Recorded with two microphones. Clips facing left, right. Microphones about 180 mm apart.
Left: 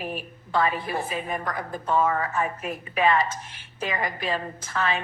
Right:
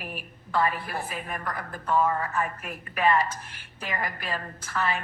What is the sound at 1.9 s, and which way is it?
Speech, 5° left (ahead or behind).